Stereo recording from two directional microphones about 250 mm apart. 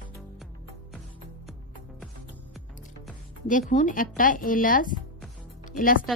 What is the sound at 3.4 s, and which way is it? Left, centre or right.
A woman's voice, left.